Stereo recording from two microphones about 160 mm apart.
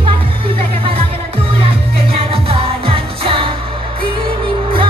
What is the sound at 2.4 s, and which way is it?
Music, 35° right (ahead or behind).